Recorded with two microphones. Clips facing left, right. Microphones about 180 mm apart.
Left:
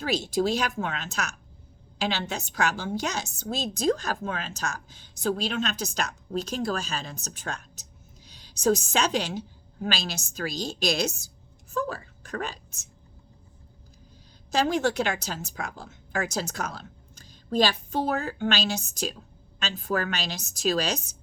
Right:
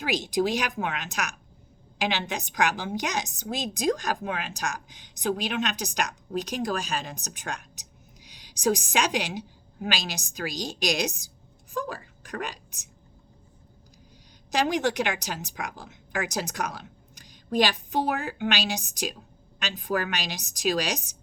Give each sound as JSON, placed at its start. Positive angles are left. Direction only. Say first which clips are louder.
{"t": 0.0, "sound": "a woman's voice", "louder": "even", "side_deg": -15}
{"t": 14.5, "sound": "a woman's voice", "louder": "left 1 dB", "side_deg": -15}